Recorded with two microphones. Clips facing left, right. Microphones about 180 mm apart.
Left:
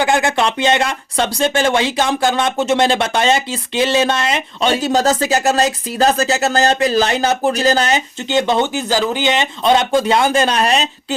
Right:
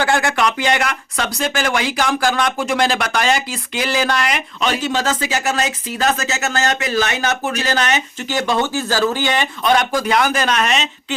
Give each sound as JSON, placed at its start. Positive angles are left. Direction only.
{"t": 0.0, "sound": "speech", "side_deg": 20}